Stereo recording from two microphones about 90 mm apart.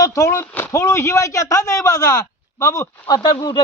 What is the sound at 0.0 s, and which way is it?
Speech, 35° left (ahead or behind).